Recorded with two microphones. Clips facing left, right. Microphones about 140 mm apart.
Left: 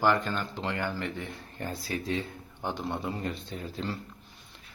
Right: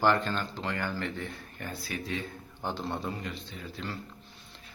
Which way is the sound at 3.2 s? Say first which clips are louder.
Left 4 dB; 40° left (ahead or behind).